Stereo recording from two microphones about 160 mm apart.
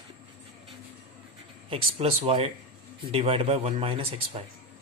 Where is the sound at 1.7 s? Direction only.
40° right (ahead or behind).